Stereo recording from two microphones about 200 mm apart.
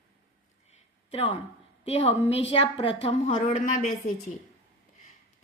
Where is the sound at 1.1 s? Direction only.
30° left (ahead or behind).